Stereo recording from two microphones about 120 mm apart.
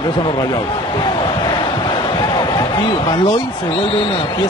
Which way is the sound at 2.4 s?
40° left (ahead or behind).